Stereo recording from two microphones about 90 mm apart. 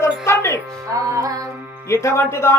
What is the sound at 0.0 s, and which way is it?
Music, 30° left (ahead or behind).